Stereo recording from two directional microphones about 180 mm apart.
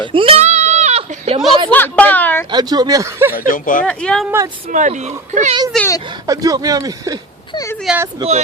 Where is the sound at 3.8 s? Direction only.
5° left (ahead or behind).